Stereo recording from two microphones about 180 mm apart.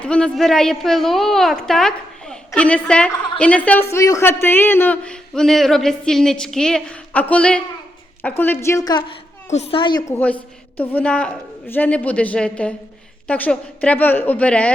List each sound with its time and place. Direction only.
0.0 s a woman's voice: 5° left (ahead or behind); by 9.1 s 25° left (ahead or behind)
9.5 s a child's voice: 35° left (ahead or behind)
10.8 s a woman's voice: 10° left (ahead or behind)